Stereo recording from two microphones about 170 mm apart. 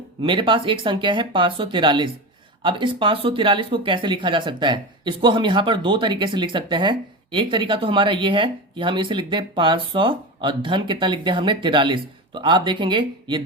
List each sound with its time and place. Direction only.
0.2 s speech: 30° right (ahead or behind)